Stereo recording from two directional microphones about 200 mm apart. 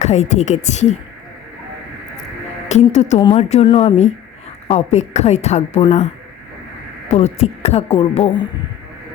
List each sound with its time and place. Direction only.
0.0 s a woman's voice: 35° left (ahead or behind)
2.6 s a woman's voice: 35° left (ahead or behind)
7.1 s a woman's voice: 35° left (ahead or behind)